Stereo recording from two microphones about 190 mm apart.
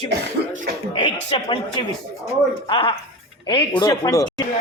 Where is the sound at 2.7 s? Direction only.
25° left (ahead or behind).